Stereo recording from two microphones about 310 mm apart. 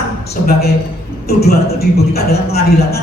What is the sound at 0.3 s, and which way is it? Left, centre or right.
A man's voice, left.